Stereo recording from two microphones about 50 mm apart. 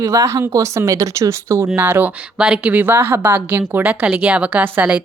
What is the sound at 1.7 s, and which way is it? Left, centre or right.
Speech, right.